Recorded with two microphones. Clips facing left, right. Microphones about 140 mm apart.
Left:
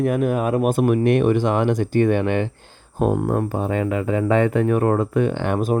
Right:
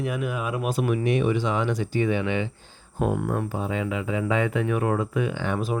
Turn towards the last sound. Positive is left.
turn(degrees=55)  # may be behind; listen again after turning